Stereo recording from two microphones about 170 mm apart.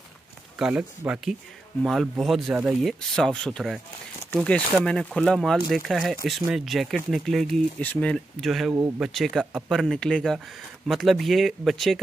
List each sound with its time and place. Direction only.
0.6 s speech: 5° right (ahead or behind)
8.7 s speech: 15° right (ahead or behind)
9.0 s speech: centre (ahead or behind)